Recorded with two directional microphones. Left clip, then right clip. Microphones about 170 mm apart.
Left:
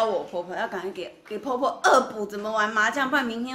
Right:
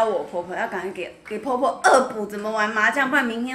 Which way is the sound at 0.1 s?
15° left (ahead or behind).